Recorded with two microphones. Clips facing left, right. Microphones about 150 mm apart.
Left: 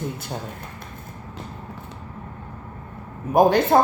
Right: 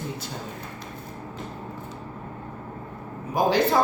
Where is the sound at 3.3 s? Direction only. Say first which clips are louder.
Left 5 dB; 55° left (ahead or behind).